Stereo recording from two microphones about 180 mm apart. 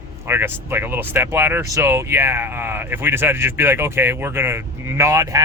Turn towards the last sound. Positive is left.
turn(degrees=-15)  # may be behind; listen again after turning